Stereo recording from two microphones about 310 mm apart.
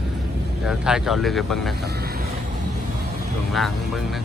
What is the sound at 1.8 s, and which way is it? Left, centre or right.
Vehicle, right.